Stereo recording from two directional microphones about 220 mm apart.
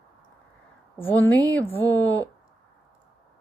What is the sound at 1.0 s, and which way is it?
Speech, 10° left (ahead or behind).